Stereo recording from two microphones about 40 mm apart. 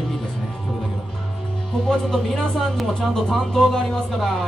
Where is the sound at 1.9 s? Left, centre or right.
Centre.